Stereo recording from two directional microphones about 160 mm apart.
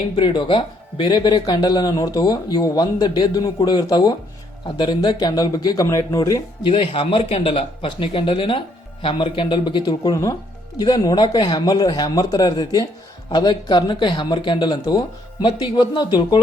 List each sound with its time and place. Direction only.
0.2 s speech: 30° left (ahead or behind)